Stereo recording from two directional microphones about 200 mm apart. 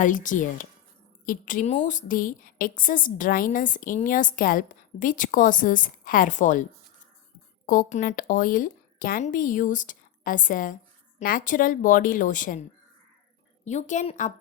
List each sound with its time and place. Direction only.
0.0 s a woman's voice: 40° left (ahead or behind)
7.7 s a woman's voice: 40° left (ahead or behind)
13.7 s a woman's voice: 35° left (ahead or behind)